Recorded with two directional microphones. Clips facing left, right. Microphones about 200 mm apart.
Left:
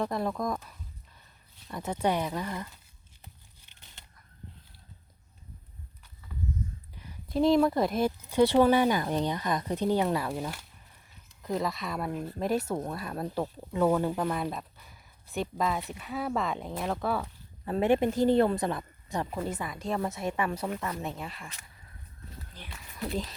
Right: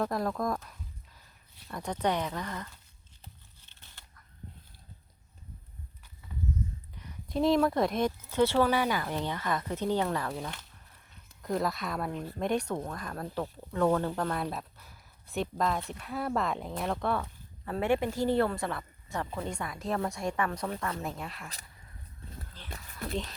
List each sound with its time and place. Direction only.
0.0 s speech: centre (ahead or behind)
3.6 s a sound: 15° left (ahead or behind)
7.3 s speech: centre (ahead or behind)
17.7 s a woman's voice: 20° left (ahead or behind)
19.5 s speech: centre (ahead or behind)
22.5 s a sound: 15° left (ahead or behind)